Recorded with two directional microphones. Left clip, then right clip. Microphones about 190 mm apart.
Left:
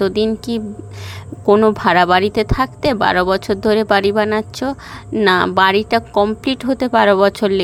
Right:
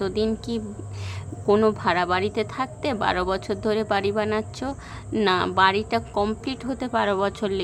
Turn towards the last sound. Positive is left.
turn(degrees=35)  # may be behind; listen again after turning